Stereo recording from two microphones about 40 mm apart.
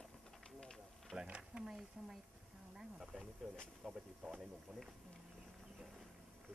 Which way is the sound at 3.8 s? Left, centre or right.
Right.